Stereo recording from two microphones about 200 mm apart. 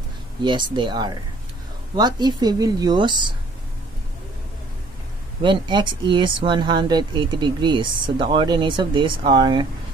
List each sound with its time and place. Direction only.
0.4 s speech: 20° right (ahead or behind)
5.4 s speech: 20° right (ahead or behind)